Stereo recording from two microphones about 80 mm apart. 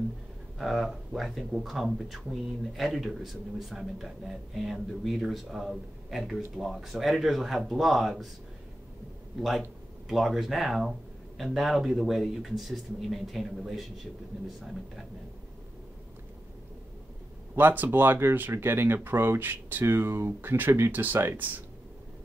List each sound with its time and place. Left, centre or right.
0.6 s speech: centre
10.0 s speech: centre
17.6 s speech: right